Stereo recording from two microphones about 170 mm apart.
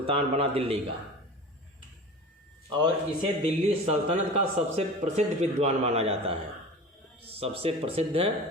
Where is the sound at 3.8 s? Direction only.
35° right (ahead or behind).